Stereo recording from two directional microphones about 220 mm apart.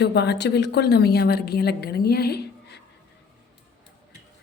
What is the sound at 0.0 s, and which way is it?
A woman's voice, 50° left (ahead or behind).